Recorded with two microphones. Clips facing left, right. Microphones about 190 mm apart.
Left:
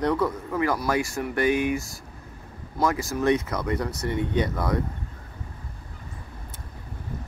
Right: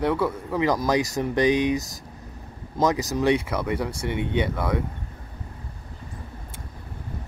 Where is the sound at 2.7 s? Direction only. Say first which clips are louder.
Right 2 dB; 20° right (ahead or behind).